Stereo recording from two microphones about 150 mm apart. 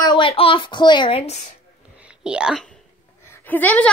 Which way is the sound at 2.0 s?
5° right (ahead or behind).